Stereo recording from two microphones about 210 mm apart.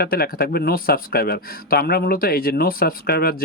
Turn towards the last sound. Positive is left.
turn(degrees=45)  # may be behind; listen again after turning